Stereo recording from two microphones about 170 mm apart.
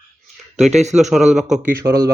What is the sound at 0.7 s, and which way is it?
Speech, 40° right (ahead or behind).